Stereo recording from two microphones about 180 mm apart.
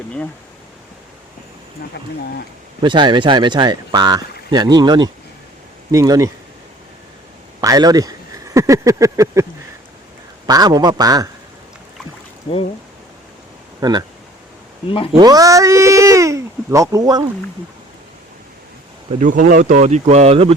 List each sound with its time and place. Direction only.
2.8 s speech: 25° right (ahead or behind)
7.6 s speech: 20° right (ahead or behind)
13.8 s speech: 25° right (ahead or behind)
14.8 s speech: 30° left (ahead or behind)
15.2 s speech: 20° right (ahead or behind)
19.2 s speech: 45° right (ahead or behind)